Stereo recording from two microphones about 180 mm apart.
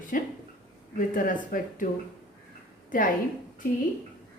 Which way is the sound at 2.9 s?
45° left (ahead or behind).